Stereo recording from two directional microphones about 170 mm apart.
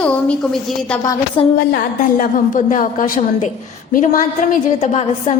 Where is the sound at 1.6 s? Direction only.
65° left (ahead or behind).